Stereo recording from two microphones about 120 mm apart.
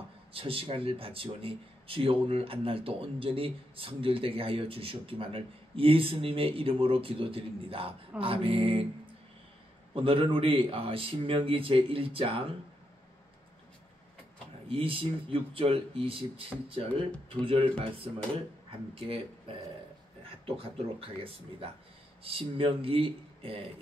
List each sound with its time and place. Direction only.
0.3 s speech: 50° right (ahead or behind)
14.7 s speech: 50° right (ahead or behind)